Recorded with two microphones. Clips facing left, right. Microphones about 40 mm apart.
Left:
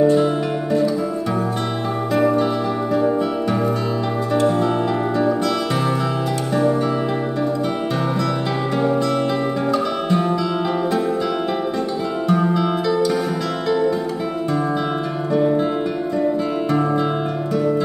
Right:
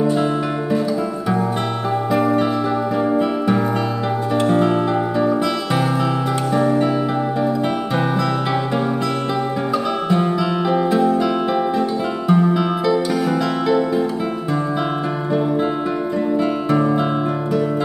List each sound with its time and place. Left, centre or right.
4.4 s music: right
6.5 s music: centre
9.7 s music: centre
12.3 s music: centre